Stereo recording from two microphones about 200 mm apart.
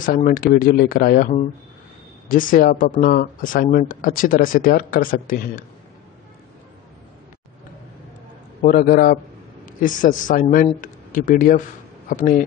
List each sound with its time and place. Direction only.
0.0 s speech: 40° left (ahead or behind)
8.6 s a man's voice: 45° left (ahead or behind)